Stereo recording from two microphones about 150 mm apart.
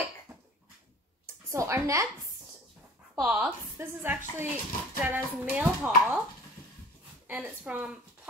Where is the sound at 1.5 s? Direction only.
20° right (ahead or behind).